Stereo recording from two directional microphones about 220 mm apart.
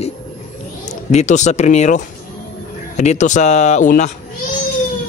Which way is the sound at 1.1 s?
35° left (ahead or behind).